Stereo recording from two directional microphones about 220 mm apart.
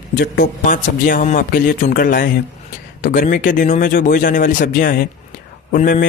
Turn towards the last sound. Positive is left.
turn(degrees=40)  # may be behind; listen again after turning